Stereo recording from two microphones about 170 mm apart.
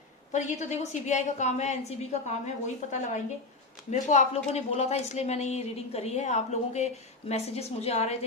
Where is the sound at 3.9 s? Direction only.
45° left (ahead or behind).